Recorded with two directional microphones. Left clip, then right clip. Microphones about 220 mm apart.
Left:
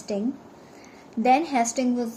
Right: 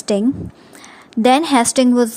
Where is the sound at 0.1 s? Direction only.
55° right (ahead or behind).